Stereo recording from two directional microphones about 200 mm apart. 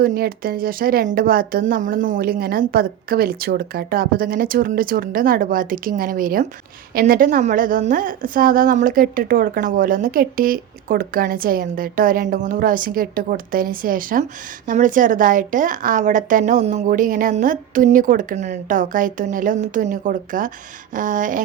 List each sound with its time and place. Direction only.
0.0 s a woman's voice: 50° right (ahead or behind)